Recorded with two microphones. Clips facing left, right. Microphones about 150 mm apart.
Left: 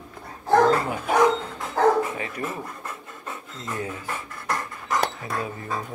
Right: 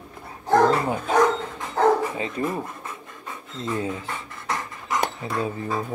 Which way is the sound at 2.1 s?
25° right (ahead or behind).